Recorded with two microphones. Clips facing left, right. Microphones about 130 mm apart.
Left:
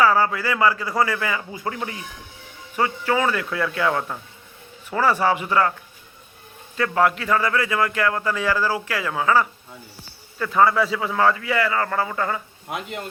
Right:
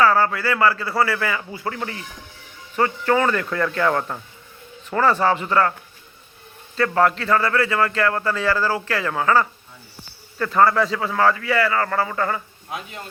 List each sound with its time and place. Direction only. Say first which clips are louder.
0.0 s speech: right 1 dB; 15° left (ahead or behind)
6.7 s speech: right 1 dB; 10° left (ahead or behind)